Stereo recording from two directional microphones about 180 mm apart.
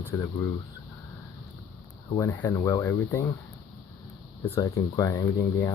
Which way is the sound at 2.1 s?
20° left (ahead or behind).